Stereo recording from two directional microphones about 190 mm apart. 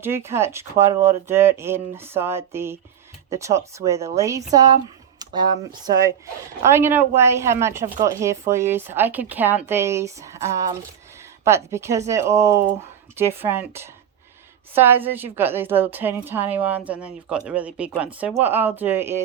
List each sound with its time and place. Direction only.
0.0 s speech: 15° right (ahead or behind)